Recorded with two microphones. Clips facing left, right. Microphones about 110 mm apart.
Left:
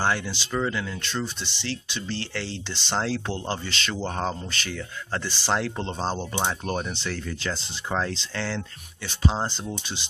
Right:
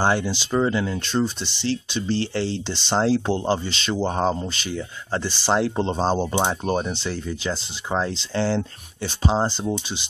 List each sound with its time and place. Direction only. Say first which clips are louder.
0.0 s speech: right 5 dB; 25° right (ahead or behind)
8.4 s speech: right 10 dB; 30° right (ahead or behind)